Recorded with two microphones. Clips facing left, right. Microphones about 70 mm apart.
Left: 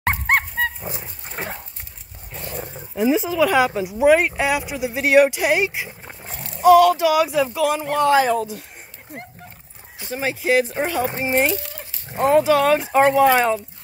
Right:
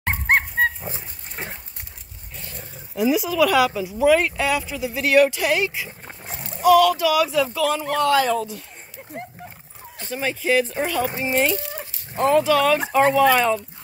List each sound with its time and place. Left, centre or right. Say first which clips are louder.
0.0 s dog: left 1 dB; left
0.8 s dog: left 2 dB; centre
3.0 s speech: left 1 dB; left
6.2 s rowboat: right 1 dB; centre
6.6 s speech: left 3 dB; left
9.9 s speech: left 1 dB; centre; by 13.4 s left